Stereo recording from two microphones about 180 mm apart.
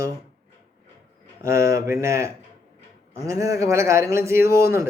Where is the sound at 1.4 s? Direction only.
15° right (ahead or behind).